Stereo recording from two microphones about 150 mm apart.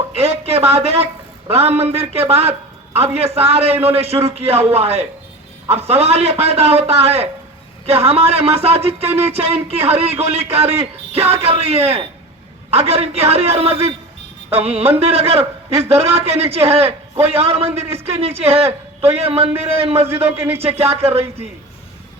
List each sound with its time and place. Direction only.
0.2 s a man's voice: 45° right (ahead or behind)